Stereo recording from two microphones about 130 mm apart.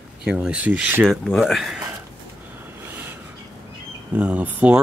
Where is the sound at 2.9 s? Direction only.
15° right (ahead or behind).